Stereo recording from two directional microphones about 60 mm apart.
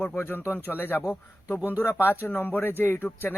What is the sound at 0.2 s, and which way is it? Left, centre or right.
Speech, left.